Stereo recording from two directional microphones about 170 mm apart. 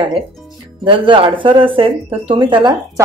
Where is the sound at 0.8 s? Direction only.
30° right (ahead or behind).